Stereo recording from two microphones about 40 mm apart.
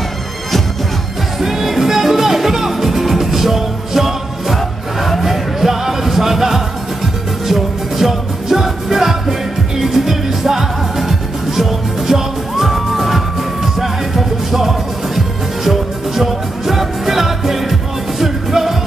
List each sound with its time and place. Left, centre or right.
1.4 s music: centre